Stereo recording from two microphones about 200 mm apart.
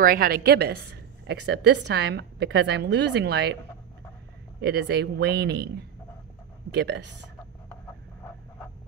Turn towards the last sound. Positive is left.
turn(degrees=-60)  # may be behind; listen again after turning